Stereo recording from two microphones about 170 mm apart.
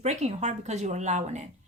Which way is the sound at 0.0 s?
40° right (ahead or behind).